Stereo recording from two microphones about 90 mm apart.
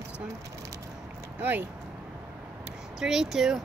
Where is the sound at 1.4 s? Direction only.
20° right (ahead or behind).